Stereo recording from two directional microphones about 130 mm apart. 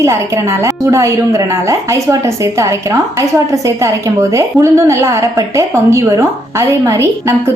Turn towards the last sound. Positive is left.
turn(degrees=-20)  # may be behind; listen again after turning